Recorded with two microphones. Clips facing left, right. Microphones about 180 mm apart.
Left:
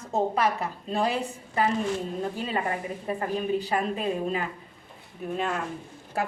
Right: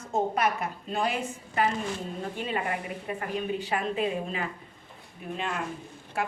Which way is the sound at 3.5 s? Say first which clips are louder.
Left 2 dB; 35° left (ahead or behind).